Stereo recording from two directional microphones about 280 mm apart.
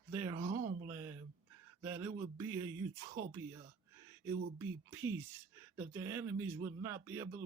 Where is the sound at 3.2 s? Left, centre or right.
Right.